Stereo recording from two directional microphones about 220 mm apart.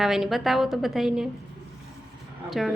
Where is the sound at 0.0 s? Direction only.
Centre (ahead or behind).